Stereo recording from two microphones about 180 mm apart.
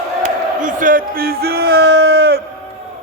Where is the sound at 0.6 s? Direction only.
50° right (ahead or behind); by 2.4 s 65° right (ahead or behind).